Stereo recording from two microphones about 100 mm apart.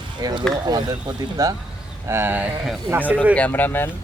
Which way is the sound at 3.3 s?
15° left (ahead or behind).